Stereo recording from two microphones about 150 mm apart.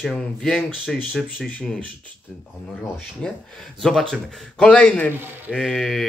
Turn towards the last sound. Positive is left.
turn(degrees=0)  # may be behind; listen again after turning